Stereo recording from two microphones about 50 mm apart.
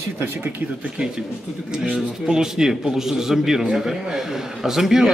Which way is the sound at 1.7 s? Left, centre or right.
Right.